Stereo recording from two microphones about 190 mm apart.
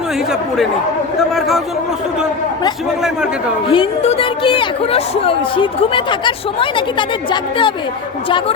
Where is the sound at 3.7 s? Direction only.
30° left (ahead or behind).